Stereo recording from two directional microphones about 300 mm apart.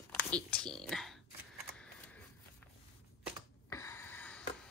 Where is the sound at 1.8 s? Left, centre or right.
Centre.